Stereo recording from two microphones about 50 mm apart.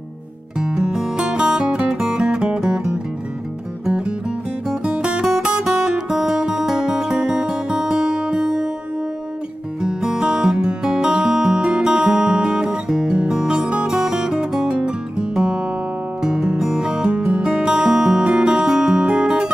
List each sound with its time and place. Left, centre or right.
0.6 s music: centre
4.9 s guitar: right
5.2 s music: centre
9.8 s music: centre